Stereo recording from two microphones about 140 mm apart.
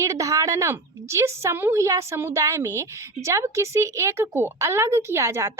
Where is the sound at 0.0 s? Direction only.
25° right (ahead or behind).